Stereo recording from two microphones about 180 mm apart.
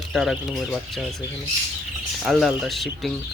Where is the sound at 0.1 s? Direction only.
Centre (ahead or behind).